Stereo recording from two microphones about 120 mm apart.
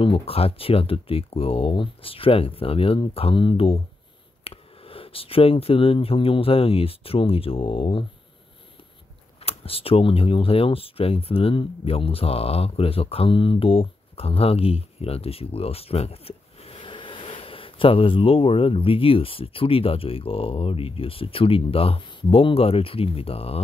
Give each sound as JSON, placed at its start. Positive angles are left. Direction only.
{"t": 0.0, "sound": "speech", "side_deg": 50}
{"t": 9.4, "sound": "speech", "side_deg": 50}